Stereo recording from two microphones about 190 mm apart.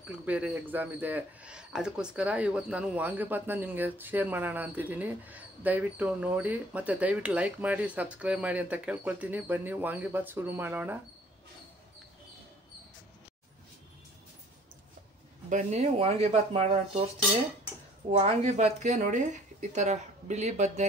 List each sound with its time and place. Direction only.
0.1 s speech: 5° right (ahead or behind)
15.5 s speech: 35° right (ahead or behind)
18.1 s speech: 35° right (ahead or behind)